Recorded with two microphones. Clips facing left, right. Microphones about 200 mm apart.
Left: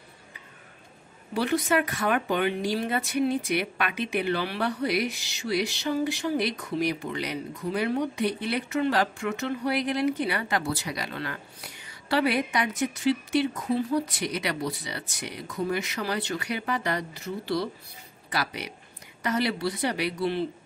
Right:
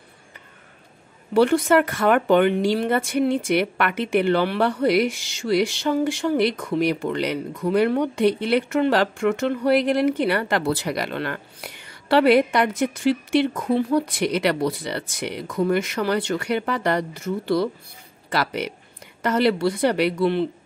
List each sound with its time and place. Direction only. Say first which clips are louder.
1.3 s speech: right 8 dB; 60° right (ahead or behind)
15.8 s speech: right 7 dB; 55° right (ahead or behind)
18.3 s speech: right 7 dB; 65° right (ahead or behind)